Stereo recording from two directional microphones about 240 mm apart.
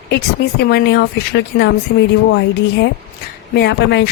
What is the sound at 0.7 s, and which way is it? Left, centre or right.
Speech, left.